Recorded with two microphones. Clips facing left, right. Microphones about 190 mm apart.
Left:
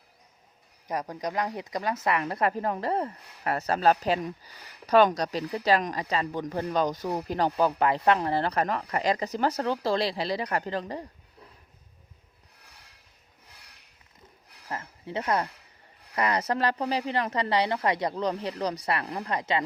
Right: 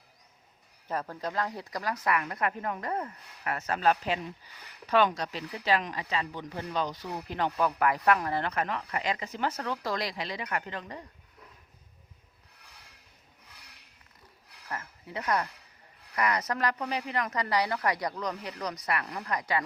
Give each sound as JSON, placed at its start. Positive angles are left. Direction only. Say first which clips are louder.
{"t": 0.9, "sound": "speech", "louder": "left 2 dB", "side_deg": 15}
{"t": 14.7, "sound": "speech", "louder": "left 4 dB", "side_deg": 25}